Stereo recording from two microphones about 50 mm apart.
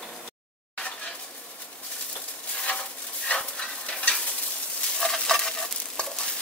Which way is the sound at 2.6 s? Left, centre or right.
Left.